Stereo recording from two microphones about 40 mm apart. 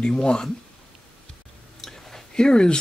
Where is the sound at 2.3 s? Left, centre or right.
Centre.